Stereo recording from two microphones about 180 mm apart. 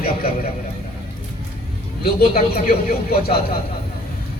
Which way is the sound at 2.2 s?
55° left (ahead or behind).